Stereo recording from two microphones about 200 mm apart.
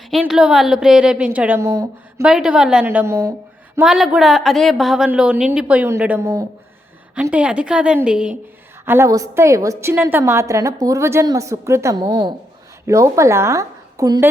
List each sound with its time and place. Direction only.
0.1 s a woman's voice: 5° right (ahead or behind)
2.2 s a woman's voice: 5° right (ahead or behind)
3.8 s a woman's voice: centre (ahead or behind)